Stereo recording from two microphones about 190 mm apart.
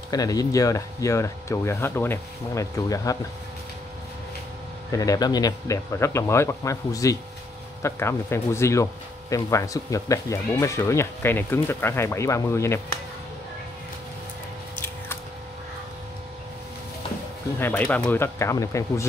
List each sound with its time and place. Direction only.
0.1 s speech: 20° left (ahead or behind)
4.9 s speech: 20° left (ahead or behind)
17.6 s speech: 10° left (ahead or behind)